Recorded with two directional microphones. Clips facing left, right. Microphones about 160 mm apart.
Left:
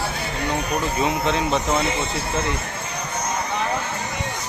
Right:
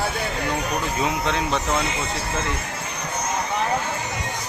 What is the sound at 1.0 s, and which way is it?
Speech, centre (ahead or behind).